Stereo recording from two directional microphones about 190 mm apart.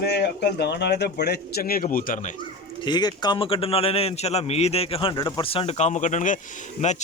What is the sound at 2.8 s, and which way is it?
A man's voice, 20° left (ahead or behind).